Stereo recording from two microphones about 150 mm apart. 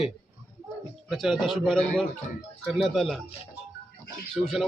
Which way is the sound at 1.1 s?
Centre (ahead or behind).